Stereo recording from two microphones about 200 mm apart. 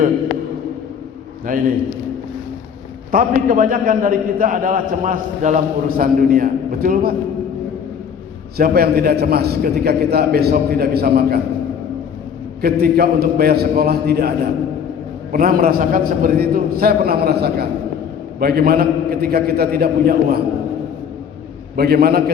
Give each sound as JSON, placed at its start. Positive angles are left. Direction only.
{"t": 1.5, "sound": "a man's voice", "side_deg": -45}
{"t": 3.1, "sound": "a man's voice", "side_deg": -45}
{"t": 8.5, "sound": "a man's voice", "side_deg": -50}
{"t": 12.6, "sound": "a man's voice", "side_deg": -50}
{"t": 21.8, "sound": "a man's voice", "side_deg": -50}